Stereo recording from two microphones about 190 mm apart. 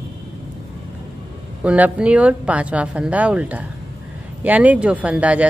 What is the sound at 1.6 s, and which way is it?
Speech, 5° right (ahead or behind).